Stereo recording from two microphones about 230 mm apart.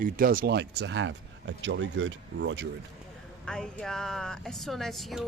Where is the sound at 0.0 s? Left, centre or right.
Right.